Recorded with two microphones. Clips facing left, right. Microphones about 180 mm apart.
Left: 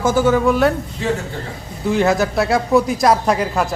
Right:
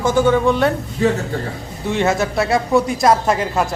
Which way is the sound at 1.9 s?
Centre (ahead or behind).